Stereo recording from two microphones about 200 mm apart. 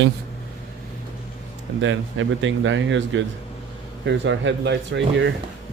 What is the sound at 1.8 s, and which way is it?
Speech, 70° right (ahead or behind).